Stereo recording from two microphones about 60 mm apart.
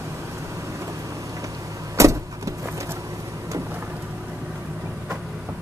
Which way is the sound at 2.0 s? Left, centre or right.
Right.